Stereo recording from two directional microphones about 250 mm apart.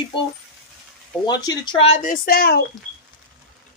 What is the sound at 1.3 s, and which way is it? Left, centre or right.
Speech, centre.